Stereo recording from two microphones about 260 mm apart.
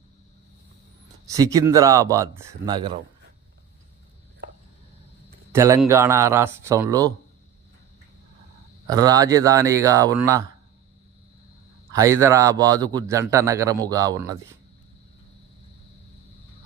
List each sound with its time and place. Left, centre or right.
1.2 s a man's voice: centre
4.4 s a sound: right
5.5 s a man's voice: centre
8.9 s a man's voice: centre
11.9 s a man's voice: centre